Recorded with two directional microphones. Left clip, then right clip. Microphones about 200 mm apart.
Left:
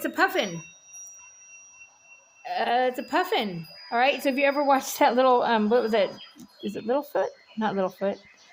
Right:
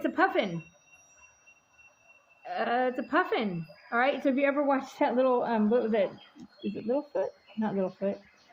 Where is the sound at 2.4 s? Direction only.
10° left (ahead or behind).